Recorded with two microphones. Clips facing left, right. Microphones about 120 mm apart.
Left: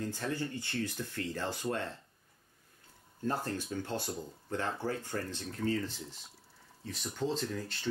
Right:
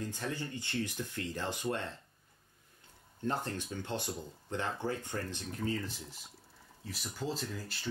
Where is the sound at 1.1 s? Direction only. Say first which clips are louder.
Left 1 dB; 15° right (ahead or behind).